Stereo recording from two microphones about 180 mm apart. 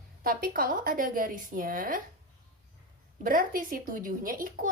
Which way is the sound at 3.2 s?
50° right (ahead or behind).